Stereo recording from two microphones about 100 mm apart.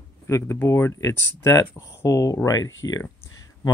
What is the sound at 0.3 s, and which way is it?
Speech, 30° left (ahead or behind).